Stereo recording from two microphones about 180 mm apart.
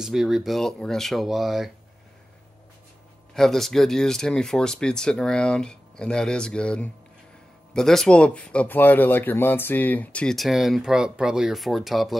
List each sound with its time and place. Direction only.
0.0 s speech: centre (ahead or behind)
3.3 s speech: centre (ahead or behind)